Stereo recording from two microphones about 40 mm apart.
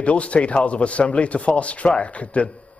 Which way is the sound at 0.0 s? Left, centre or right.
Left.